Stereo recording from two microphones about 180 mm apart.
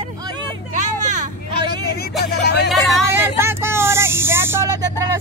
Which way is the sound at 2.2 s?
65° left (ahead or behind).